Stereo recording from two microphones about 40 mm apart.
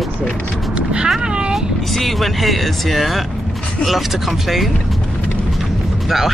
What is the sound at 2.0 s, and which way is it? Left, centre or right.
Speech, centre.